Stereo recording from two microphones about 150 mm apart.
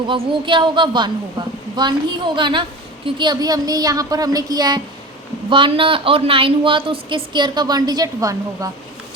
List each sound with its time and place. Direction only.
0.1 s a woman's voice: 35° right (ahead or behind)